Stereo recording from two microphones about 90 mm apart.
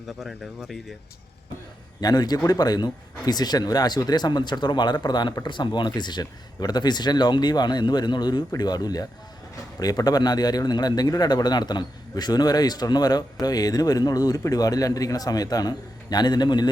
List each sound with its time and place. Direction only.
0.2 s speech: 5° right (ahead or behind)
2.0 s a man's voice: 50° left (ahead or behind)